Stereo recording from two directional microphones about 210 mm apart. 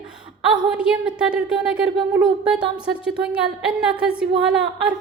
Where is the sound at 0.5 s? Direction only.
5° right (ahead or behind).